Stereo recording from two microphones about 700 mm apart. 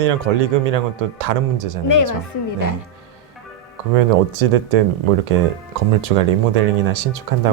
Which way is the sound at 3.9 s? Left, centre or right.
Right.